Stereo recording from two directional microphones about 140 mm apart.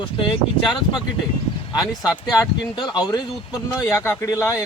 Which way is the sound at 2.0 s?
25° left (ahead or behind).